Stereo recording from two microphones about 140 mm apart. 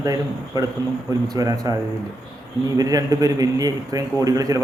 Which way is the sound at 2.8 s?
25° right (ahead or behind).